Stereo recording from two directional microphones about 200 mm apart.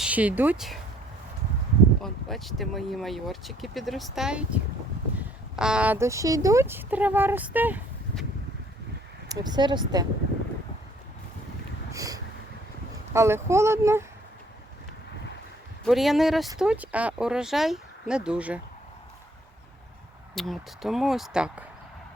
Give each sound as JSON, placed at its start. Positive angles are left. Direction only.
{"t": 0.0, "sound": "speech", "side_deg": -5}
{"t": 2.0, "sound": "speech", "side_deg": 0}
{"t": 9.3, "sound": "speech", "side_deg": -20}
{"t": 11.9, "sound": "a sound", "side_deg": -15}
{"t": 13.1, "sound": "speech", "side_deg": -15}
{"t": 15.9, "sound": "speech", "side_deg": 0}
{"t": 20.3, "sound": "speech", "side_deg": 0}